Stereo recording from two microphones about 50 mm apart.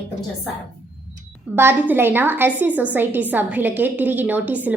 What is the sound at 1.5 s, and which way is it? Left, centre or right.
A woman's voice, right.